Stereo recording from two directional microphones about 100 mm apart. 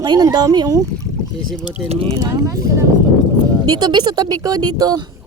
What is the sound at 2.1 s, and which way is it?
Speech, 40° right (ahead or behind).